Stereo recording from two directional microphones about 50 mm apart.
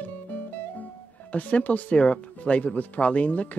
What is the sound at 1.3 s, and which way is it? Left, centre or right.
Speech, left.